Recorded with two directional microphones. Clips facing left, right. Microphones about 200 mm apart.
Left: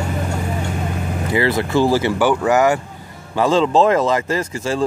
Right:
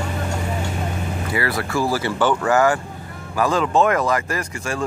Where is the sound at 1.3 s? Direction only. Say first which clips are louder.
Left 6 dB; 20° left (ahead or behind).